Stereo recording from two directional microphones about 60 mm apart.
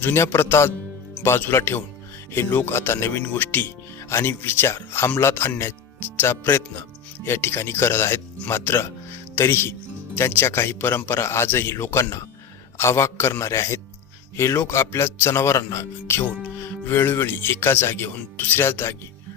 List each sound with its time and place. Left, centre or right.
0.0 s a man's voice: left